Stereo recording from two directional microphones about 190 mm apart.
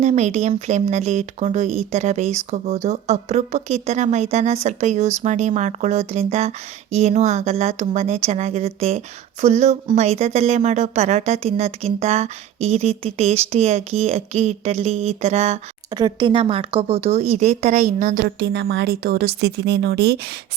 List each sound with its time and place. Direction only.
0.0 s speech: 35° right (ahead or behind)
16.0 s speech: 25° right (ahead or behind)
18.2 s speech: 65° right (ahead or behind)